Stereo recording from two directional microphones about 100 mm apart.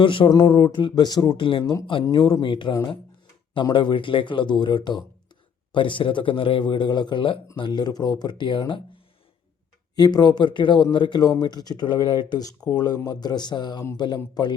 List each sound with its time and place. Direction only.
0.0 s a man's voice: 60° left (ahead or behind)
9.9 s speech: 45° left (ahead or behind)